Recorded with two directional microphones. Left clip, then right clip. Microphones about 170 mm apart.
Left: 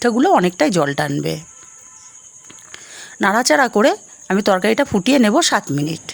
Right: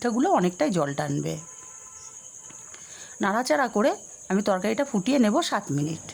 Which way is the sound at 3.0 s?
30° left (ahead or behind).